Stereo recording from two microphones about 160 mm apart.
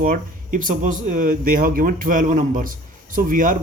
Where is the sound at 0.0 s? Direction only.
60° right (ahead or behind).